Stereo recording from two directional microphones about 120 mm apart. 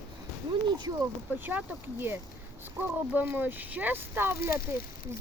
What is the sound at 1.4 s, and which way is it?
Speech, 15° right (ahead or behind).